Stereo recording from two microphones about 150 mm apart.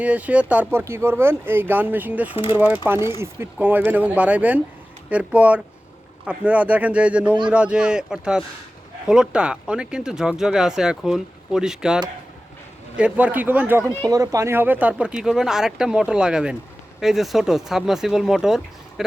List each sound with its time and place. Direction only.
0.0 s speech: 10° right (ahead or behind)
2.3 s speech: 40° left (ahead or behind)
2.6 s speech: 10° right (ahead or behind)